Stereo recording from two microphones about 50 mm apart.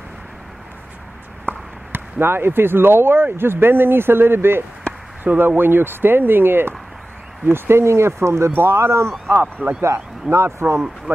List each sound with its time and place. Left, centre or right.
1.5 s a sound: right
1.9 s speech: right
5.2 s speech: right
8.5 s speech: right
9.3 s speech: right
10.3 s speech: right